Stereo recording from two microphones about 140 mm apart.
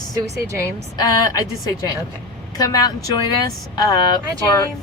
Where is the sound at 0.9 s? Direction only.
25° left (ahead or behind).